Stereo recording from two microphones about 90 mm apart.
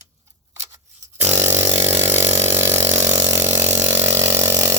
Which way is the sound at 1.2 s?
30° right (ahead or behind).